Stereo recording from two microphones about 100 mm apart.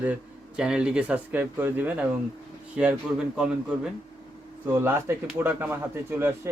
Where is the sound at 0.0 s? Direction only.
10° right (ahead or behind).